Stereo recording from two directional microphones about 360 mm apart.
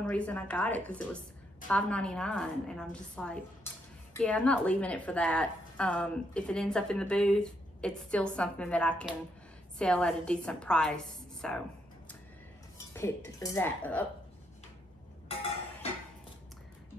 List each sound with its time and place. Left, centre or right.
0.0 s a woman's voice: centre
13.4 s a woman's voice: centre